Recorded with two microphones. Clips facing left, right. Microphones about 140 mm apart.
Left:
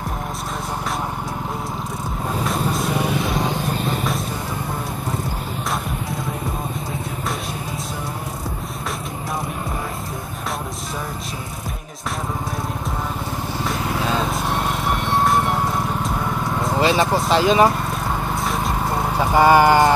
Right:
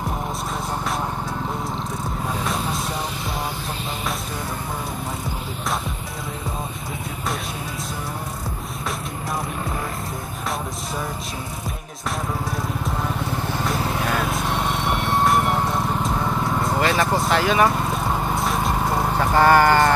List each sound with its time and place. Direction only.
2.8 s vehicle: 65° left (ahead or behind)
14.2 s music: centre (ahead or behind)
16.7 s vehicle: 20° left (ahead or behind)
18.3 s vehicle: centre (ahead or behind)
19.1 s horse: 10° left (ahead or behind)